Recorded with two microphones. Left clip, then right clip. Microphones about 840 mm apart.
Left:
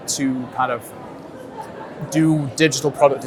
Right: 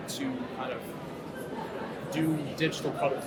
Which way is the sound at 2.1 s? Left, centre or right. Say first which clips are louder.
Left 13 dB; left.